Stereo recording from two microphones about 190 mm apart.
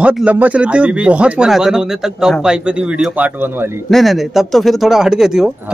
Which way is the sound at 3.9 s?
Centre (ahead or behind).